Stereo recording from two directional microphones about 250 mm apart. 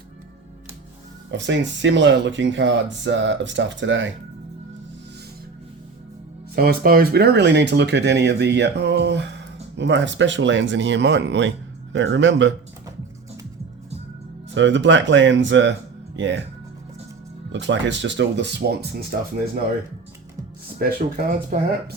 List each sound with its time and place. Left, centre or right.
1.3 s speech: right
6.6 s speech: right
14.5 s speech: right
17.5 s speech: right
20.7 s speech: right